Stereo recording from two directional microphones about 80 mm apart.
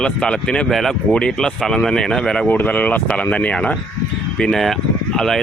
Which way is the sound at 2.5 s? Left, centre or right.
Centre.